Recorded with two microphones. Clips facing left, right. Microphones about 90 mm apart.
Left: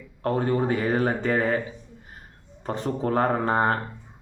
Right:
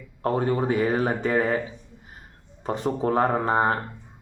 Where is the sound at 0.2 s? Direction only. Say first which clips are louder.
Even; 25° right (ahead or behind).